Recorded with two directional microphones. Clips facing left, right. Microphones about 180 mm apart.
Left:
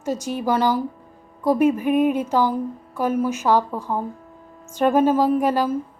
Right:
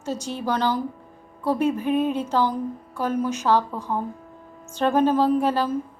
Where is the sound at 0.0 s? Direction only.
10° left (ahead or behind).